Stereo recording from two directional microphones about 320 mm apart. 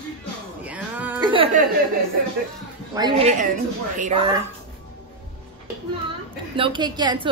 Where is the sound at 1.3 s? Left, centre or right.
Centre.